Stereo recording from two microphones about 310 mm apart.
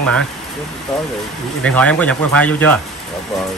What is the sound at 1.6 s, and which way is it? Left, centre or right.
Speech, centre.